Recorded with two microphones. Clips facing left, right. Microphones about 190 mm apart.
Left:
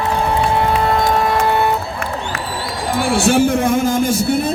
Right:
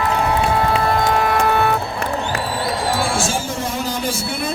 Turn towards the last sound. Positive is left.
turn(degrees=50)  # may be behind; listen again after turning